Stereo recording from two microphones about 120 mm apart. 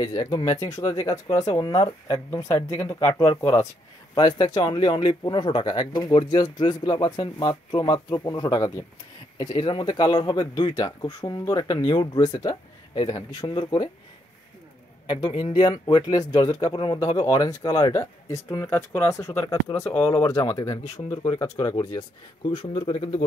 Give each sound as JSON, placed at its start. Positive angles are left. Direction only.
{"t": 0.0, "sound": "speech", "side_deg": 30}
{"t": 4.1, "sound": "speech", "side_deg": 35}
{"t": 15.0, "sound": "speech", "side_deg": 40}
{"t": 22.5, "sound": "speech", "side_deg": 40}